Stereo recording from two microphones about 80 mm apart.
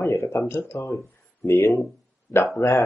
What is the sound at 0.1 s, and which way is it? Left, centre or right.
Speech, left.